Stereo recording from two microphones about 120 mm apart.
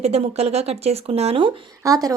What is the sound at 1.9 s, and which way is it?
Speech, 30° right (ahead or behind).